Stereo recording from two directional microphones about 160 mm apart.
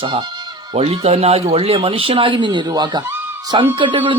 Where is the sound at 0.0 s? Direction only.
30° right (ahead or behind).